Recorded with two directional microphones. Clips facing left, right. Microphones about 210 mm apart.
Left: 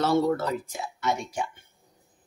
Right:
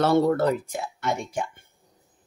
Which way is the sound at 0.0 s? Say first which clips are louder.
Right 4 dB; 55° right (ahead or behind).